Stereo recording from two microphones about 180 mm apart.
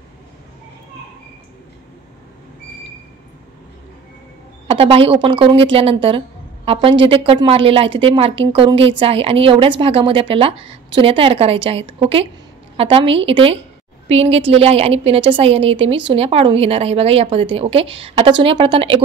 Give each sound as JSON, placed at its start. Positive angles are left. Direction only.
{"t": 4.6, "sound": "a woman's voice", "side_deg": -30}